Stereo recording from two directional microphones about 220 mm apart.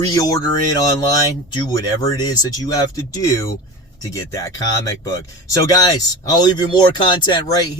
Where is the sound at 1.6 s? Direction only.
15° left (ahead or behind).